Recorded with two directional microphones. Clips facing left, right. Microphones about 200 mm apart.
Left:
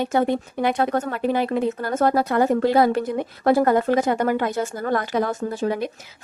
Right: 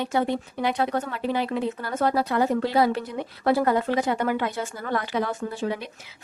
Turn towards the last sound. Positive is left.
turn(degrees=45)  # may be behind; listen again after turning